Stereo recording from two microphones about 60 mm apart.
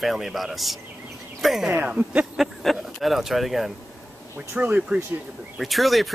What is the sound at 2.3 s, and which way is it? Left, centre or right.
Speech, centre.